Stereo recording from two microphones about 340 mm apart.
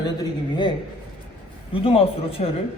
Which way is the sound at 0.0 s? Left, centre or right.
Centre.